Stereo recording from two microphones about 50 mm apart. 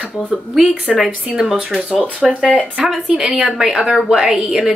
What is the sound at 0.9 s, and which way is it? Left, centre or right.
A woman's voice, centre.